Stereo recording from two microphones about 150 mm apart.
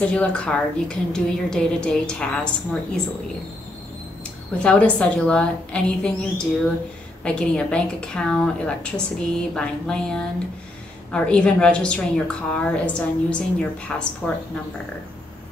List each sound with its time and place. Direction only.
0.0 s a woman's voice: 5° left (ahead or behind)
4.6 s a woman's voice: 10° left (ahead or behind)